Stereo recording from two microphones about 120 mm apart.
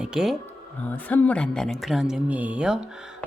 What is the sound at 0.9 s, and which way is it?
Speech, 15° left (ahead or behind).